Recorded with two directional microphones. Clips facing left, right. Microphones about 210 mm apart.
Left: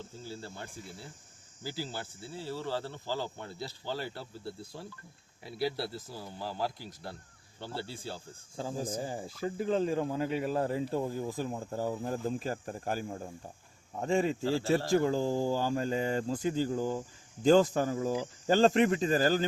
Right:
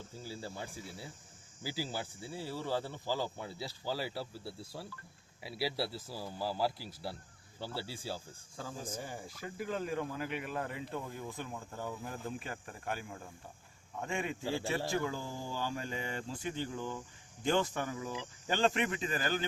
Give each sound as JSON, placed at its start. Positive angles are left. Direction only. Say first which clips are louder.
{"t": 0.2, "sound": "speech", "louder": "right 1 dB", "side_deg": -10}
{"t": 8.5, "sound": "speech", "louder": "left 7 dB", "side_deg": 30}